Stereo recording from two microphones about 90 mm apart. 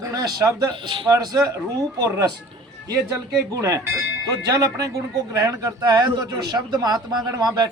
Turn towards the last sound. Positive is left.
turn(degrees=-50)  # may be behind; listen again after turning